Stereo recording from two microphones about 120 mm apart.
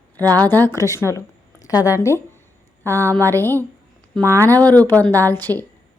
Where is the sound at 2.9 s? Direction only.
20° left (ahead or behind).